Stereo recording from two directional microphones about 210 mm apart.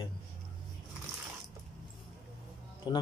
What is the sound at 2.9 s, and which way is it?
Speech, 20° left (ahead or behind).